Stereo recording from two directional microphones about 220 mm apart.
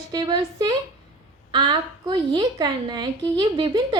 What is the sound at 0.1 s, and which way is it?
A woman's voice, 20° right (ahead or behind).